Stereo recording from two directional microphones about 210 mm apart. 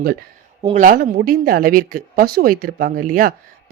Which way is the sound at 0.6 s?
35° right (ahead or behind).